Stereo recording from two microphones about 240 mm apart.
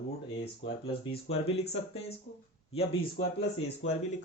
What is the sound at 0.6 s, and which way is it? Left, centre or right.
Speech, left.